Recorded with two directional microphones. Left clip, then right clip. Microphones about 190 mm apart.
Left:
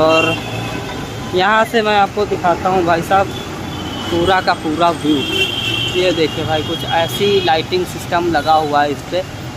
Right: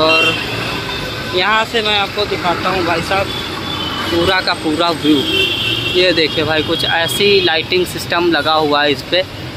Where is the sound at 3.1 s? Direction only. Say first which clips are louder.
Left 4 dB; 30° left (ahead or behind).